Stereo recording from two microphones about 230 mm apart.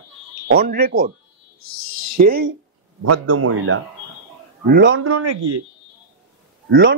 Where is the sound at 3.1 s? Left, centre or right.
Right.